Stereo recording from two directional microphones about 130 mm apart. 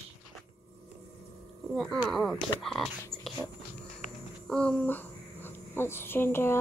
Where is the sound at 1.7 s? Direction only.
Centre (ahead or behind).